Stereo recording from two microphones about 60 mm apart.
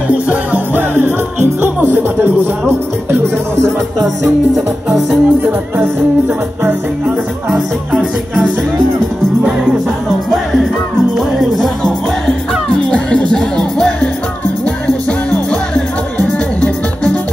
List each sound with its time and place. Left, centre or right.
0.1 s music: right
0.7 s music: right
4.6 s music: centre
5.4 s music: right
7.5 s music: centre
10.3 s music: centre
14.9 s music: centre